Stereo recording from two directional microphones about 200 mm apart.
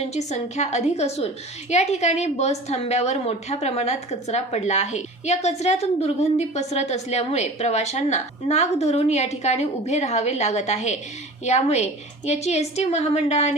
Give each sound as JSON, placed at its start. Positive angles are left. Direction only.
{"t": 0.1, "sound": "a woman's voice", "side_deg": 35}